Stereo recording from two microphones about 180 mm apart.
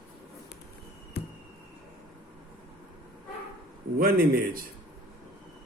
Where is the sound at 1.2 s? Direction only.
65° left (ahead or behind).